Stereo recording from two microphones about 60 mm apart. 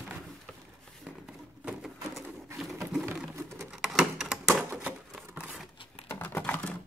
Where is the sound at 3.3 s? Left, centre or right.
Right.